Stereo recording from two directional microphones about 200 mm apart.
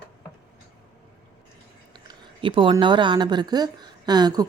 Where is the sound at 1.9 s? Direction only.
20° right (ahead or behind).